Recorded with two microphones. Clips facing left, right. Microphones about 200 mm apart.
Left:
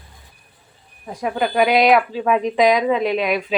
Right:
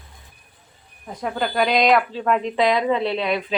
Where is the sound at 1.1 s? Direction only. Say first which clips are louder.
Left 3 dB; 10° left (ahead or behind).